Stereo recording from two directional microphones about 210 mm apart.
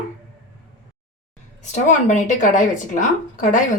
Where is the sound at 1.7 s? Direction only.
35° left (ahead or behind).